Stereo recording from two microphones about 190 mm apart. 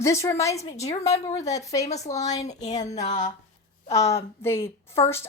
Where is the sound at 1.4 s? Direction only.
15° left (ahead or behind).